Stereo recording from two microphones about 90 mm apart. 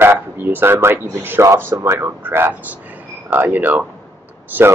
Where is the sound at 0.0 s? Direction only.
25° right (ahead or behind).